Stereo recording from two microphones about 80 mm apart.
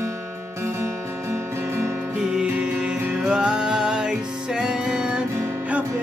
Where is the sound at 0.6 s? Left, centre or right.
Right.